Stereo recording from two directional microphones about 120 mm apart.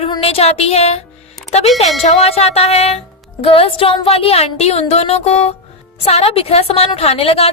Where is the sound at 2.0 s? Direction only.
60° left (ahead or behind).